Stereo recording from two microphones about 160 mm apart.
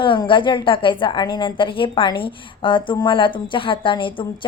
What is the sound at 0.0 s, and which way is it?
A woman's voice, 30° left (ahead or behind).